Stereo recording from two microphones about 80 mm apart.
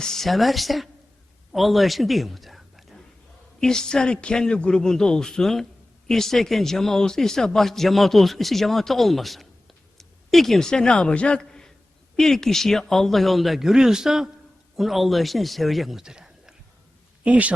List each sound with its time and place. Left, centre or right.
0.0 s a man's voice: centre